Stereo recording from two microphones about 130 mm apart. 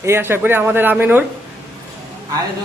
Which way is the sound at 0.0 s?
20° right (ahead or behind).